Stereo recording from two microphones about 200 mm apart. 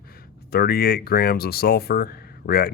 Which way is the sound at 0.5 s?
50° left (ahead or behind).